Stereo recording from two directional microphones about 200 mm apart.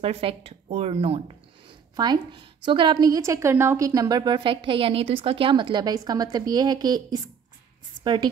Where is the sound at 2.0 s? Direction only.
20° right (ahead or behind).